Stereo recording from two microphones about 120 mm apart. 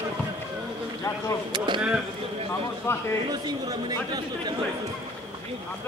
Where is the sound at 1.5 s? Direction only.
40° right (ahead or behind).